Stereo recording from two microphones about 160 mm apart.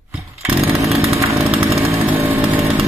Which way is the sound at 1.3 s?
Centre (ahead or behind).